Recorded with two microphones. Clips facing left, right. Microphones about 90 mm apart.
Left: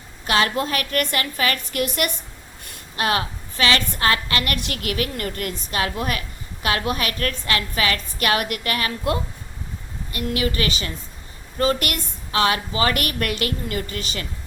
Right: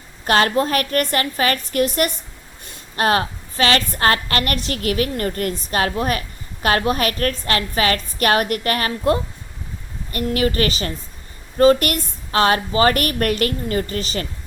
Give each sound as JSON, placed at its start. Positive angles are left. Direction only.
{"t": 0.3, "sound": "a woman's voice", "side_deg": -40}